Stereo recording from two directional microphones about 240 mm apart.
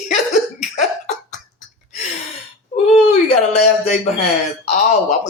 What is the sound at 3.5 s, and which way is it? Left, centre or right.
Speech, left.